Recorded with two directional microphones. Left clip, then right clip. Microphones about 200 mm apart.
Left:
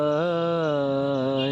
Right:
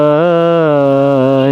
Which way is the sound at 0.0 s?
45° right (ahead or behind).